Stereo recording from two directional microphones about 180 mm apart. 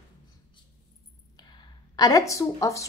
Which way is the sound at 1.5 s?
20° left (ahead or behind).